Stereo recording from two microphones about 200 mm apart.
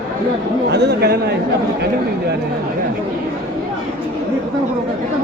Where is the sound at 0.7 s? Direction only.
55° right (ahead or behind).